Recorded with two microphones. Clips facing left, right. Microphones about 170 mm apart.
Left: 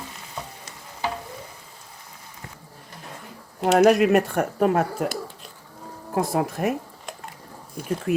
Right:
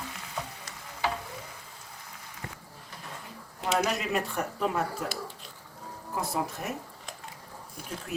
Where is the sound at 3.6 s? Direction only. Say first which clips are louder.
Left 12 dB; 60° left (ahead or behind).